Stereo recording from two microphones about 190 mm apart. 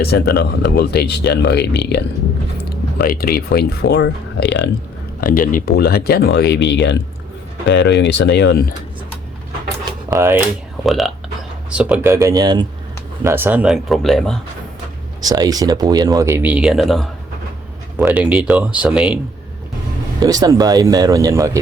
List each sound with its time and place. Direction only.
0.0 s speech: 55° left (ahead or behind)
5.2 s speech: 45° left (ahead or behind)
10.1 s speech: 10° right (ahead or behind)
10.8 s speech: centre (ahead or behind)
15.2 s speech: 20° right (ahead or behind)
20.1 s speech: 20° right (ahead or behind)